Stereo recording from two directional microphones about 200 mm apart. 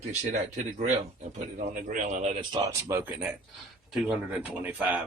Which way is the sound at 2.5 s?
10° right (ahead or behind).